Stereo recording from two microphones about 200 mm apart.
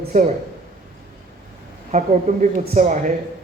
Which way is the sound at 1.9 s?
35° right (ahead or behind).